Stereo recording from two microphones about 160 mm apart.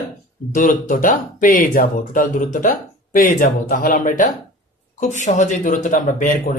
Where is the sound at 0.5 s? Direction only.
55° left (ahead or behind).